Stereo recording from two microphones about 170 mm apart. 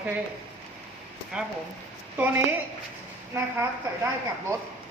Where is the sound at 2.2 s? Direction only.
10° right (ahead or behind).